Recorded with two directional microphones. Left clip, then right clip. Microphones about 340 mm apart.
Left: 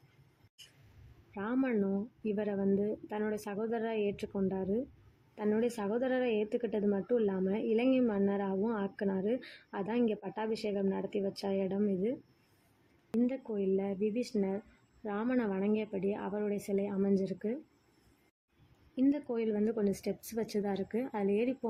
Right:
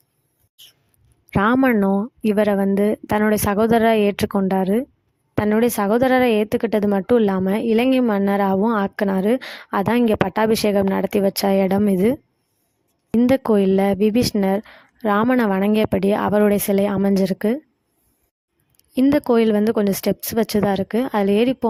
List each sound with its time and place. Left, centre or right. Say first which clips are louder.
1.4 s a woman's voice: right 17 dB; right
13.1 s a woman's voice: right 18 dB; right
18.9 s a woman's voice: right 16 dB; right